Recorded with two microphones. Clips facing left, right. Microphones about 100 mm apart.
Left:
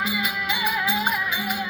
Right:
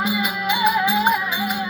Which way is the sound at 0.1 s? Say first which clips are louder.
Right 5 dB; 25° right (ahead or behind).